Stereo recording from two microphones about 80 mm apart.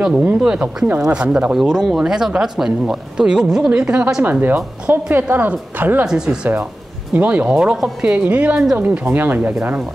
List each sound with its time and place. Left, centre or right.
0.0 s speech: centre
6.0 s speech: centre
7.2 s speech: centre
8.1 s speech: centre